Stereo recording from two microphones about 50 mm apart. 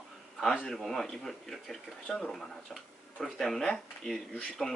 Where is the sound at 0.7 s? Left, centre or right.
Centre.